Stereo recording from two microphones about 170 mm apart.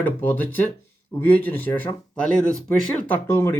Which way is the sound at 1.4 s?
10° left (ahead or behind).